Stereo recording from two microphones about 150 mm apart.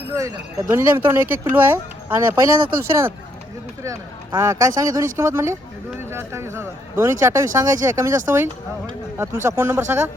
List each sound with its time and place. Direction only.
0.1 s speech: 20° right (ahead or behind)